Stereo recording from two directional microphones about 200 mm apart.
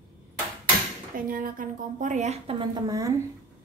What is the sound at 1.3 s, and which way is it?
A woman's voice, 45° right (ahead or behind).